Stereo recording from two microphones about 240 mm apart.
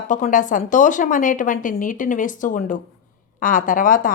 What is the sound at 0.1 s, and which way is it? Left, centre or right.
A woman's voice, left.